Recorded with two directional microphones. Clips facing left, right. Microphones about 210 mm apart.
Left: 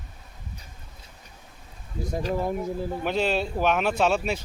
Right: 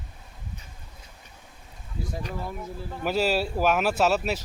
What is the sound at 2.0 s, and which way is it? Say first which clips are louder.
Speech: left 2 dB; 45° left (ahead or behind).